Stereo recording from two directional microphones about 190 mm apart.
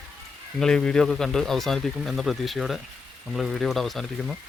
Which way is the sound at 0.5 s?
5° left (ahead or behind).